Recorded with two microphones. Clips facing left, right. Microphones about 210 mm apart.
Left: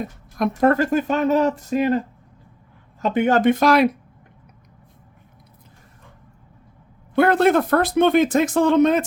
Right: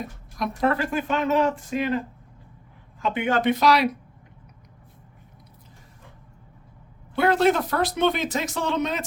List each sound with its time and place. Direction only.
0.3 s speech: 50° left (ahead or behind)
7.2 s speech: 55° left (ahead or behind)